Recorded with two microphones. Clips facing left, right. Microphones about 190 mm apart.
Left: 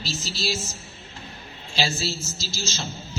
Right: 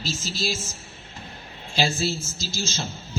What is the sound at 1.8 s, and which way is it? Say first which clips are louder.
A man's voice: right 3 dB; 55° right (ahead or behind).